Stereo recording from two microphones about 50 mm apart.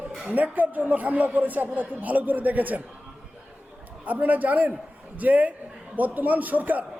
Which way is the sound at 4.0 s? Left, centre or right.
Right.